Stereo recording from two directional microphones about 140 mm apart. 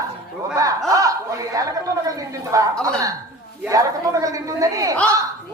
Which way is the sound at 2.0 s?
25° right (ahead or behind).